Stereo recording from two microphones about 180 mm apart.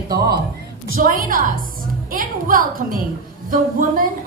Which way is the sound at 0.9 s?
50° right (ahead or behind).